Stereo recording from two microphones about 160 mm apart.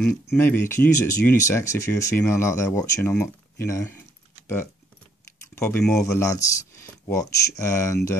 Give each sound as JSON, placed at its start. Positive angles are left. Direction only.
{"t": 0.4, "sound": "speech", "side_deg": 15}
{"t": 5.5, "sound": "speech", "side_deg": 15}